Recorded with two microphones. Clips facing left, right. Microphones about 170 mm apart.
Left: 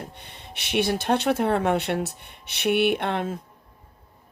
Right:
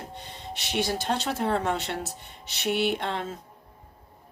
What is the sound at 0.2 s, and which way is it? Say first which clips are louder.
Speech: right 4 dB; 60° left (ahead or behind).